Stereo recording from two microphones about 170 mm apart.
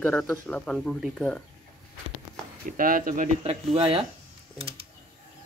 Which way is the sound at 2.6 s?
55° right (ahead or behind).